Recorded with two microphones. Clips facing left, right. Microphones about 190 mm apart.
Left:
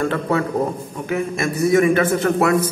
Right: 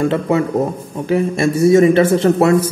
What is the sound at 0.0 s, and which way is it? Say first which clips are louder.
Speech: right 4 dB; 20° right (ahead or behind).